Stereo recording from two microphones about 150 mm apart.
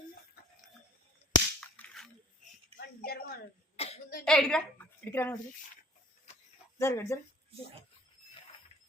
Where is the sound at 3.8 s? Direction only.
45° left (ahead or behind).